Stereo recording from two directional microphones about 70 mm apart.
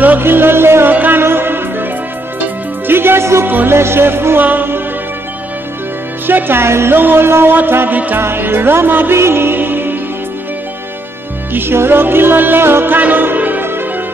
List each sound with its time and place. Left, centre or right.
0.0 s music: right
6.2 s music: right
11.5 s music: right